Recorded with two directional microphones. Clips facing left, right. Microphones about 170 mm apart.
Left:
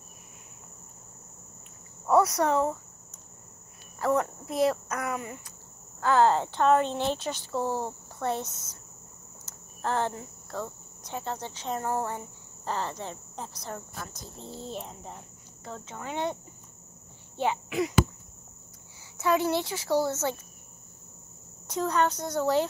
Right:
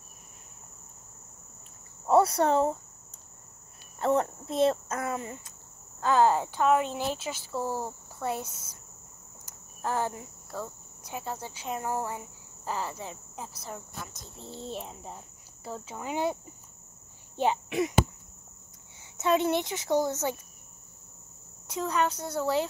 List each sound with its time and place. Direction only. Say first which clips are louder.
2.0 s speech: right 1 dB; 30° right (ahead or behind)
4.0 s speech: even; 30° right (ahead or behind)
5.9 s speech: left 1 dB; 15° right (ahead or behind)
8.2 s cricket: left 2 dB; 10° right (ahead or behind)
17.5 s speech: right 1 dB; 25° right (ahead or behind)
19.1 s speech: even; 20° right (ahead or behind)
21.8 s speech: left 2 dB; 5° right (ahead or behind)